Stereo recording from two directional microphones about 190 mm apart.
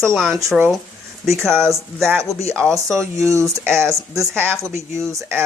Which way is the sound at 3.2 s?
15° right (ahead or behind).